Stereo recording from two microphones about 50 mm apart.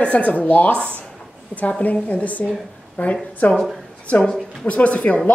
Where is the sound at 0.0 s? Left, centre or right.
Left.